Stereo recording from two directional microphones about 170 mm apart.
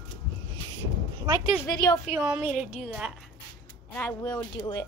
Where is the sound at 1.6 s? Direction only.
25° left (ahead or behind).